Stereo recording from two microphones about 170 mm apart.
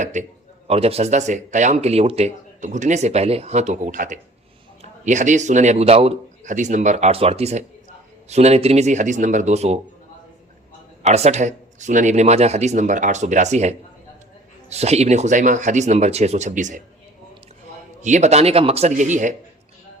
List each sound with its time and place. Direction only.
0.0 s a man's voice: 45° right (ahead or behind)
11.0 s a man's voice: 40° right (ahead or behind)
18.0 s speech: 45° right (ahead or behind)